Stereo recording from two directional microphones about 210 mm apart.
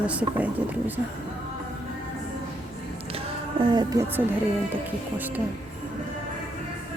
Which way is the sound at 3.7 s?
20° right (ahead or behind).